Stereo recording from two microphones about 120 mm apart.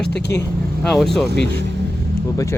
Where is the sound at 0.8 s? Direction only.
5° left (ahead or behind).